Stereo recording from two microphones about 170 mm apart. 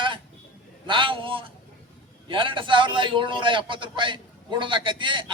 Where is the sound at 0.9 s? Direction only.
30° right (ahead or behind).